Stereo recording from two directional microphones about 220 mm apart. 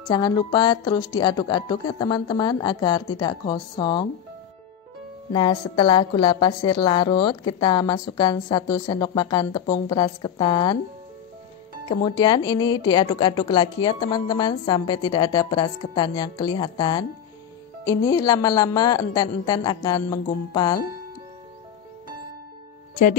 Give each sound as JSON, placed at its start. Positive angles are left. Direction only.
{"t": 0.1, "sound": "a woman's voice", "side_deg": 20}
{"t": 5.3, "sound": "a woman's voice", "side_deg": 20}
{"t": 11.9, "sound": "a woman's voice", "side_deg": 20}